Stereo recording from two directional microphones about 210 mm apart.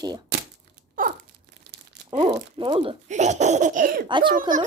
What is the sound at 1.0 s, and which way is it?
Tearing, 40° right (ahead or behind).